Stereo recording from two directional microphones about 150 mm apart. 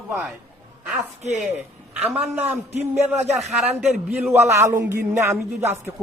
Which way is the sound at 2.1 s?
5° right (ahead or behind).